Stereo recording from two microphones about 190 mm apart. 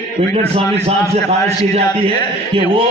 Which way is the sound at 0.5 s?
30° right (ahead or behind).